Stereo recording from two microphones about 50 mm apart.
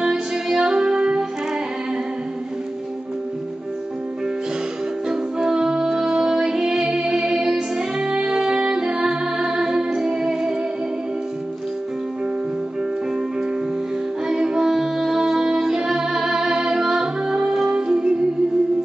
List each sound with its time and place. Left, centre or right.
0.0 s music: centre
5.0 s music: centre
14.2 s music: centre